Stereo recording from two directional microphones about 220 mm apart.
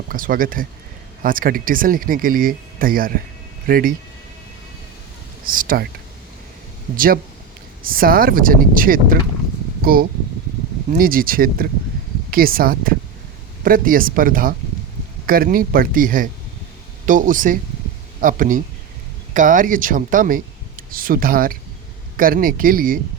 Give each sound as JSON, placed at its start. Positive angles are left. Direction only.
{"t": 0.1, "sound": "speech", "side_deg": -40}
{"t": 5.5, "sound": "speech", "side_deg": -40}
{"t": 6.9, "sound": "speech", "side_deg": -40}